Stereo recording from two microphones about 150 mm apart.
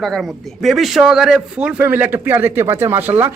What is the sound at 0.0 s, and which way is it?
A man's voice, centre (ahead or behind).